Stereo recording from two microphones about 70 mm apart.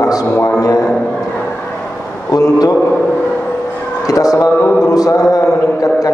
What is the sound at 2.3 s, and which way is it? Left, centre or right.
Mantra, left.